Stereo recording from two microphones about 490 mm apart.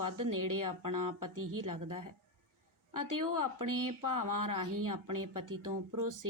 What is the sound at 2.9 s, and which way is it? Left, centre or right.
Speech, right.